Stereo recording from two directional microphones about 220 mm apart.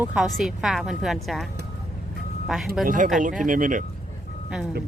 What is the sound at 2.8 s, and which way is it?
Speech, 40° right (ahead or behind).